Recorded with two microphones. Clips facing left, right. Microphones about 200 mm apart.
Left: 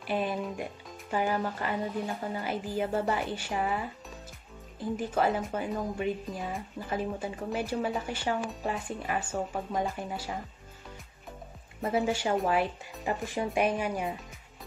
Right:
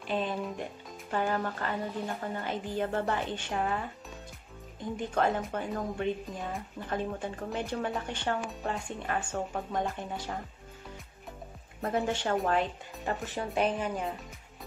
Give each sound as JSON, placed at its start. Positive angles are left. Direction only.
{"t": 0.0, "sound": "speech", "side_deg": 10}
{"t": 11.8, "sound": "speech", "side_deg": 5}